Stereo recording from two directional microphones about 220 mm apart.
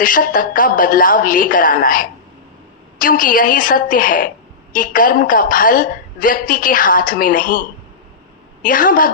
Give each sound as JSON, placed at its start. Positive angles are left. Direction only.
{"t": 0.0, "sound": "a woman's voice", "side_deg": 40}